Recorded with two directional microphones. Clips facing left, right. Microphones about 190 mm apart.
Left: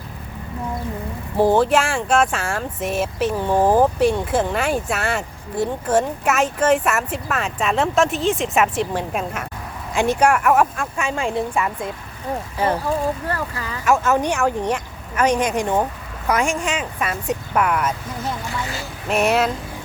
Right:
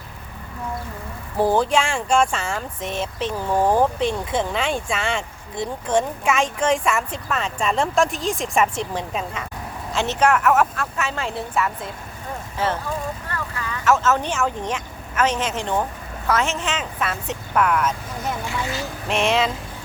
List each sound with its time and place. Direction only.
1.4 s speech: 5° left (ahead or behind)
13.2 s speech: 35° left (ahead or behind)
13.8 s speech: 15° left (ahead or behind)
19.0 s speech: 5° left (ahead or behind)